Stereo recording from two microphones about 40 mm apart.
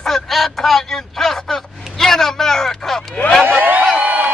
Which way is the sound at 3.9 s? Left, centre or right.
Right.